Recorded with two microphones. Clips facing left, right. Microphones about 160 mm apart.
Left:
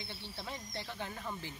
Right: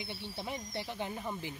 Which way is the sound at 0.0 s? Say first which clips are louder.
Right 4 dB; 15° right (ahead or behind).